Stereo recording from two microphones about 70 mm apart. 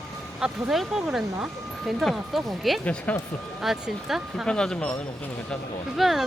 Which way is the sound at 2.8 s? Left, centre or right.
Left.